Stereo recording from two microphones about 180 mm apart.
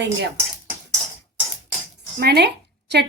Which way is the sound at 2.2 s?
65° right (ahead or behind).